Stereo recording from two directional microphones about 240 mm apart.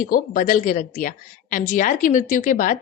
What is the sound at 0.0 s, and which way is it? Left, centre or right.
A woman's voice, left.